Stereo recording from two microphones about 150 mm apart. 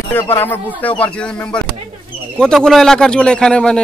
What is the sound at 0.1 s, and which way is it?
A man's voice, 15° left (ahead or behind).